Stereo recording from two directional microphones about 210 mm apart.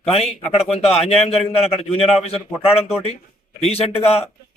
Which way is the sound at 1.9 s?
30° left (ahead or behind).